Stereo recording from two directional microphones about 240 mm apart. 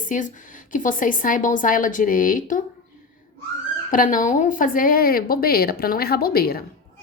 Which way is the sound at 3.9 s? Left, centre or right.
Left.